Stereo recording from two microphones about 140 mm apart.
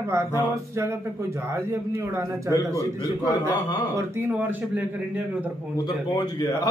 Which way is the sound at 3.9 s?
15° right (ahead or behind).